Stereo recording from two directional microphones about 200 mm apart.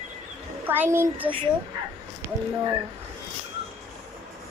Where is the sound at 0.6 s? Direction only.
10° right (ahead or behind).